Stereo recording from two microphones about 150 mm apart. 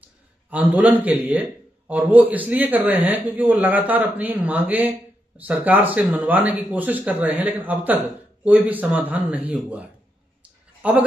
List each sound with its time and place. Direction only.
0.0 s a man's voice: 10° right (ahead or behind)